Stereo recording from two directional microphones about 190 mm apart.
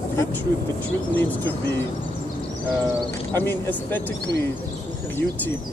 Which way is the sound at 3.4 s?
10° left (ahead or behind).